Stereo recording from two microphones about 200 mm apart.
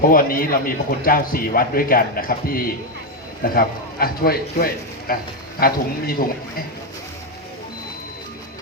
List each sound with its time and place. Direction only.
0.1 s a man's voice: 45° left (ahead or behind)